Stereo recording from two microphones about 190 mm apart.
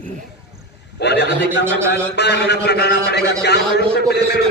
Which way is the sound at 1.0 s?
65° left (ahead or behind).